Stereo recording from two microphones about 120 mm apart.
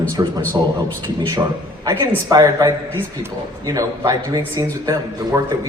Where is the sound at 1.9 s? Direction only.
35° right (ahead or behind).